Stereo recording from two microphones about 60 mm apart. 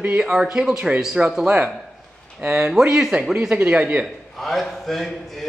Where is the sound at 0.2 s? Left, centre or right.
Centre.